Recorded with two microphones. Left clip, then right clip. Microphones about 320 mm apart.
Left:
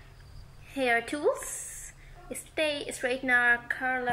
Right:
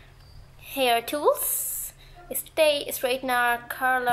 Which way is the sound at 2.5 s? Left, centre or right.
Centre.